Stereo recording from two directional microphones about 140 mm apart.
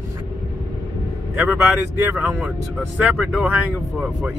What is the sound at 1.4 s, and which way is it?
Speech, 15° right (ahead or behind).